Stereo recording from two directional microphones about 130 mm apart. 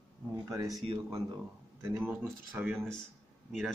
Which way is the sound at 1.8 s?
15° right (ahead or behind).